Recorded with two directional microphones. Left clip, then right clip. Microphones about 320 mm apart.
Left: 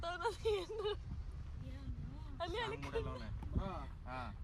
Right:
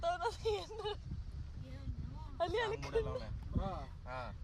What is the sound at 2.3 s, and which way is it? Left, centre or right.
Speech, centre.